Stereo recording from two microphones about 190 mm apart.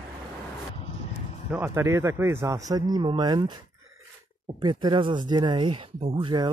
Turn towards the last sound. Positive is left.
turn(degrees=-25)  # may be behind; listen again after turning